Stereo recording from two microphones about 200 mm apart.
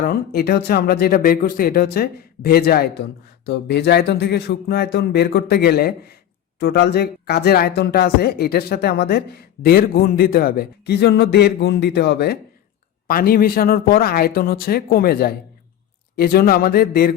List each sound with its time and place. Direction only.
0.0 s speech: 50° left (ahead or behind)